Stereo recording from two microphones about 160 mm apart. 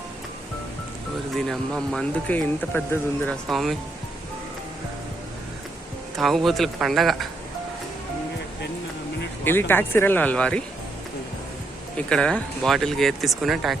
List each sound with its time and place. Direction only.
1.5 s speech: centre (ahead or behind)
3.5 s speech: centre (ahead or behind)
6.1 s speech: centre (ahead or behind)
9.4 s speech: 15° left (ahead or behind)
11.9 s speech: 5° left (ahead or behind)